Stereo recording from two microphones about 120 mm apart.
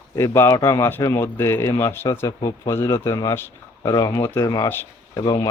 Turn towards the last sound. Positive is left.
turn(degrees=35)  # may be behind; listen again after turning